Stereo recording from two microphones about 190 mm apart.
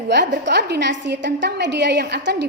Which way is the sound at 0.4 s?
65° right (ahead or behind).